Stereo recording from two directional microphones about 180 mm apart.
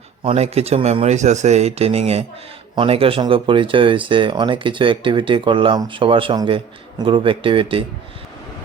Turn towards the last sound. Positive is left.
turn(degrees=-30)  # may be behind; listen again after turning